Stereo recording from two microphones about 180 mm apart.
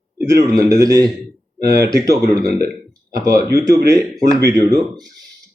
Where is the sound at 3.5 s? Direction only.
20° right (ahead or behind).